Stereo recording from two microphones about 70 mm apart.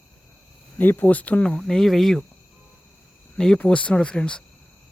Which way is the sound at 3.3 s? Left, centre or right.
Centre.